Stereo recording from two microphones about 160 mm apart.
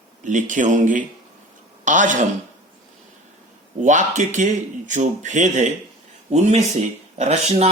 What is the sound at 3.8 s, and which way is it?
Speech, 50° right (ahead or behind).